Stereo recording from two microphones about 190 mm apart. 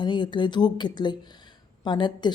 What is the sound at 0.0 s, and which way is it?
Speech, 25° left (ahead or behind).